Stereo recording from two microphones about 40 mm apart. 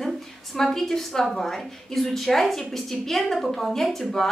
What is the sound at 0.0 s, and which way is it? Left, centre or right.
A woman's voice, centre.